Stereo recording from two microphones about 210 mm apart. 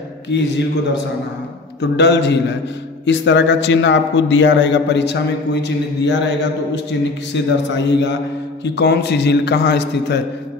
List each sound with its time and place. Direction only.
0.3 s a man's voice: 55° left (ahead or behind)
1.8 s a man's voice: 55° left (ahead or behind)